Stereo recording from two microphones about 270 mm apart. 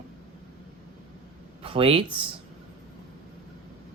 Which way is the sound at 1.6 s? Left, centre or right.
Right.